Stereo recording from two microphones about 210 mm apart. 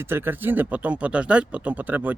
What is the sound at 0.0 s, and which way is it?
A man's voice, 10° right (ahead or behind).